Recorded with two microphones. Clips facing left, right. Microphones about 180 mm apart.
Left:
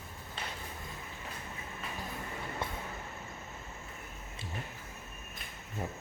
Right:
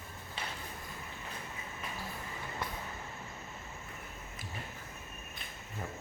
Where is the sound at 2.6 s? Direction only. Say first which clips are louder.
Left 1 dB; 25° left (ahead or behind).